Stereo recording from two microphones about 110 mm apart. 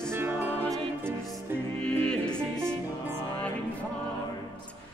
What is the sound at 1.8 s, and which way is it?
Music, 10° left (ahead or behind).